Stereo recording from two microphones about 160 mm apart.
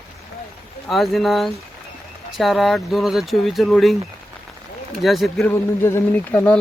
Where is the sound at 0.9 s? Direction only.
Centre (ahead or behind).